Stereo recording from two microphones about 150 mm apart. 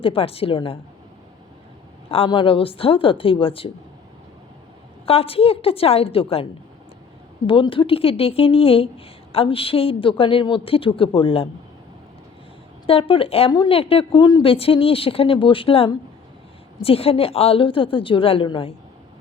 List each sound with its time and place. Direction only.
0.0 s speech: 35° left (ahead or behind)
2.0 s speech: 40° left (ahead or behind)
5.0 s speech: 40° left (ahead or behind)
12.9 s speech: 35° left (ahead or behind)